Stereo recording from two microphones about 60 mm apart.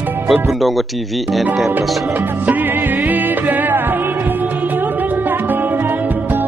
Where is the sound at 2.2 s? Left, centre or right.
Right.